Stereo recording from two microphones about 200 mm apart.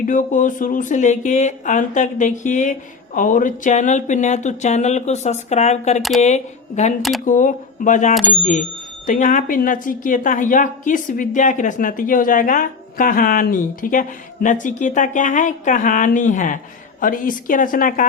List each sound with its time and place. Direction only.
0.0 s a woman's voice: 40° left (ahead or behind)
6.0 s speech: centre (ahead or behind)
6.2 s a woman's voice: 35° left (ahead or behind)